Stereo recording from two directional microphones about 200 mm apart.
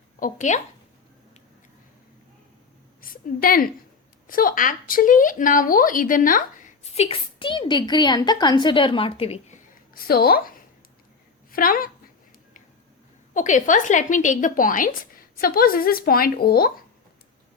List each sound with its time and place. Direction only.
0.2 s speech: 40° left (ahead or behind)
3.0 s a woman's voice: 45° left (ahead or behind)
9.9 s a woman's voice: 50° left (ahead or behind)
11.5 s a woman's voice: 45° left (ahead or behind)
13.3 s a woman's voice: 40° left (ahead or behind)